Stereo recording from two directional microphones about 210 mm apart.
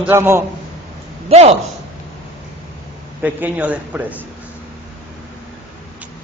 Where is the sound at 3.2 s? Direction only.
5° right (ahead or behind).